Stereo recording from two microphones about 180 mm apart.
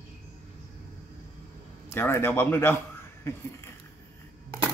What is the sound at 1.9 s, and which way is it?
A man's voice, 10° left (ahead or behind).